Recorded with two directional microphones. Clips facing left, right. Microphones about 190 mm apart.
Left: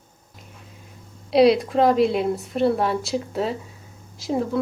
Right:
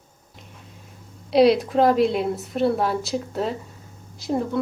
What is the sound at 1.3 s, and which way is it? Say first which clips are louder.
Speech: even; centre (ahead or behind).